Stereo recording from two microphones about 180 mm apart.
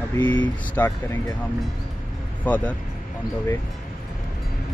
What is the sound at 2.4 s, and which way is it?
Speech, 10° left (ahead or behind).